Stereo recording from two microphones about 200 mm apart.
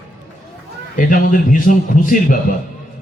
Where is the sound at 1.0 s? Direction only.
40° left (ahead or behind).